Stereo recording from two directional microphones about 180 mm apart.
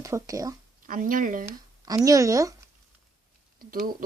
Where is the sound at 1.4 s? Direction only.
20° right (ahead or behind).